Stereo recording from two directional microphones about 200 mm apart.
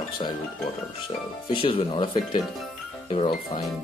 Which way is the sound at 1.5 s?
25° left (ahead or behind).